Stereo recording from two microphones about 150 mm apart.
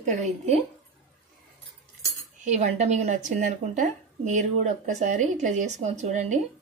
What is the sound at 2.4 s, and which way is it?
Speech, 45° right (ahead or behind).